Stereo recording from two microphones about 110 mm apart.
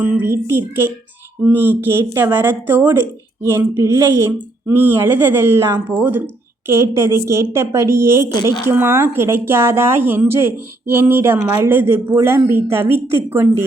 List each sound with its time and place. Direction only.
0.3 s speech: 25° right (ahead or behind)